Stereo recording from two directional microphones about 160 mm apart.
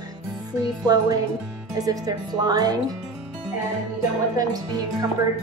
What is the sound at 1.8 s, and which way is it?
Speech, 25° right (ahead or behind).